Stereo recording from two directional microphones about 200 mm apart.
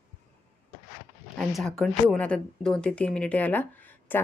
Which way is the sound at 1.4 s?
Centre (ahead or behind).